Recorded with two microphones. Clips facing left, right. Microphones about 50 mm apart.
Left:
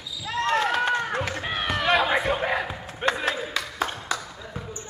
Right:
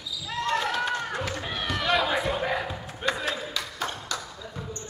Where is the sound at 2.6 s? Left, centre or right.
Centre.